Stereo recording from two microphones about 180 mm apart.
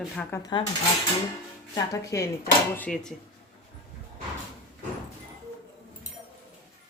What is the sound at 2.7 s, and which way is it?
Speech, 5° left (ahead or behind).